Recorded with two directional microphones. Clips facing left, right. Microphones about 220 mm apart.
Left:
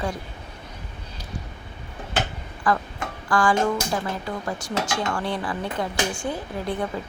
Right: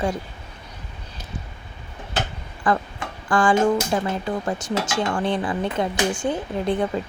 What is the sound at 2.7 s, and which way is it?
Speech, 20° right (ahead or behind).